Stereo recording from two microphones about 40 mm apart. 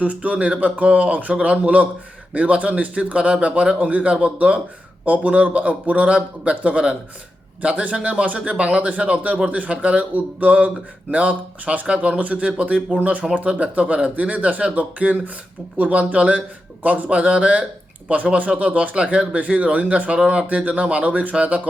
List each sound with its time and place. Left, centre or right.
0.0 s a man's voice: right